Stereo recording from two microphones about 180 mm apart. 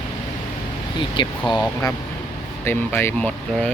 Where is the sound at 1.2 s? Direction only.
25° left (ahead or behind).